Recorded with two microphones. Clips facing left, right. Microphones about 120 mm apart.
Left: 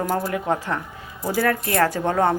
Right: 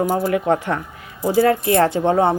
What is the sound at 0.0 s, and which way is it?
A woman's voice, 15° right (ahead or behind).